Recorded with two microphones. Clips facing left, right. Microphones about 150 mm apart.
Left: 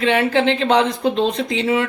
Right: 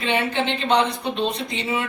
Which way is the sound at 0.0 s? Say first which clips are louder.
Left 6 dB; 90° left.